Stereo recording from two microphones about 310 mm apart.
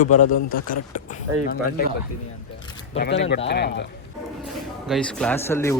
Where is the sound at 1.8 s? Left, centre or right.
Left.